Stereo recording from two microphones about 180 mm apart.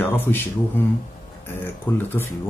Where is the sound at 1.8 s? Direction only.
10° left (ahead or behind).